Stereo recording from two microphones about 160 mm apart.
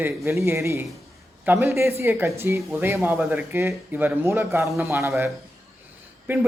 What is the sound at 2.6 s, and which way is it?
Speech, centre (ahead or behind).